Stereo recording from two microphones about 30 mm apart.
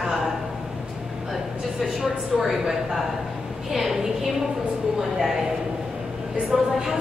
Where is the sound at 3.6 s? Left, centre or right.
Centre.